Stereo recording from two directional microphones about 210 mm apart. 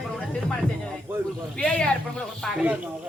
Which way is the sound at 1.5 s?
5° left (ahead or behind).